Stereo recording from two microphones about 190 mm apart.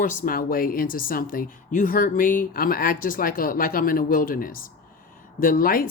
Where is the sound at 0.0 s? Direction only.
45° left (ahead or behind).